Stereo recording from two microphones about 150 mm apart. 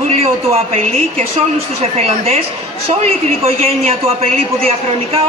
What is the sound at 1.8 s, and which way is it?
A man's voice, 40° right (ahead or behind).